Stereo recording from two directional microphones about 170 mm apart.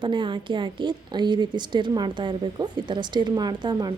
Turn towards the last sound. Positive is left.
turn(degrees=-25)  # may be behind; listen again after turning